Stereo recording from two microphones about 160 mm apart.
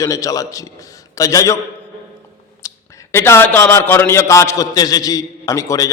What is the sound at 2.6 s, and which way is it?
A man's voice, 15° left (ahead or behind).